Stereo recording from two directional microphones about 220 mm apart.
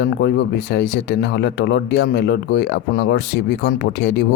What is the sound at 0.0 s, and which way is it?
Speech, 50° left (ahead or behind).